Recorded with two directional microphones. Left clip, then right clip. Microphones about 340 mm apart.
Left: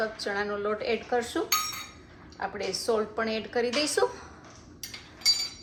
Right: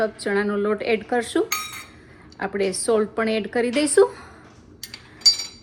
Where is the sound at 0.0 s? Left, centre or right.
Right.